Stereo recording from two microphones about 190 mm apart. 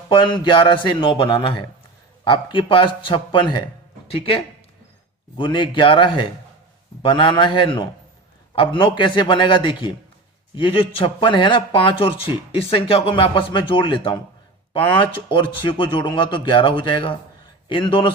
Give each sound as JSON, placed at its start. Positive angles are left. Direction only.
{"t": 0.1, "sound": "speech", "side_deg": 25}
{"t": 5.4, "sound": "speech", "side_deg": 25}